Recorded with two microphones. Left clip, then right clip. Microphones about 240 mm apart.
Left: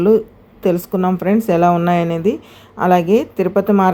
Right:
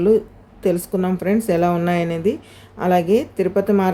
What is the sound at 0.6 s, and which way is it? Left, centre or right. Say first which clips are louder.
A woman's voice: left 3 dB; centre.